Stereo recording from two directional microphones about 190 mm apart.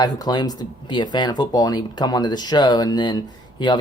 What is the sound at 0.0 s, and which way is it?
Speech, 20° left (ahead or behind).